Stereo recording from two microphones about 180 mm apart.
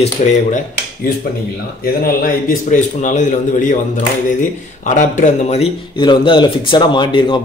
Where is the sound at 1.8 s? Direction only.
55° left (ahead or behind).